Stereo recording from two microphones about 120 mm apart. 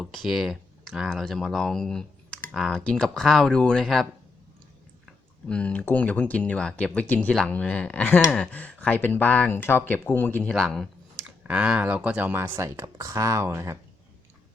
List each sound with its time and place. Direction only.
0.0 s speech: centre (ahead or behind)
5.5 s speech: 10° left (ahead or behind)
10.5 s speech: 5° left (ahead or behind)
11.4 s speech: 10° right (ahead or behind)